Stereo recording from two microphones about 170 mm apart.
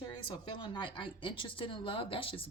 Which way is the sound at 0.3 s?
25° left (ahead or behind).